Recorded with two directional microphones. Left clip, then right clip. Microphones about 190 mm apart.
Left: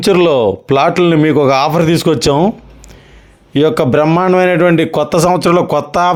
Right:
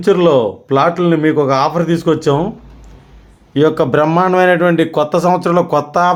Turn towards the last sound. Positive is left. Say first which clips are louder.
# left 1 dB
turn(degrees=40)  # may be behind; listen again after turning